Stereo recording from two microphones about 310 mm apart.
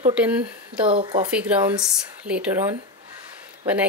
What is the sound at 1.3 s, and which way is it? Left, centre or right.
Speech, centre.